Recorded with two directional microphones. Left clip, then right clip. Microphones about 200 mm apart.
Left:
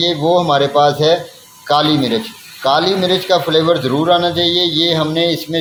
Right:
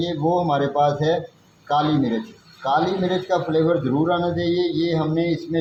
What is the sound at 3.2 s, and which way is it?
A man's voice, 50° left (ahead or behind).